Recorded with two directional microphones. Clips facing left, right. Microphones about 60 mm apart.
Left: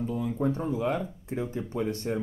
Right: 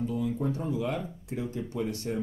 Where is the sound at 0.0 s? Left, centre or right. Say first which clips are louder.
Left 1 dB; left.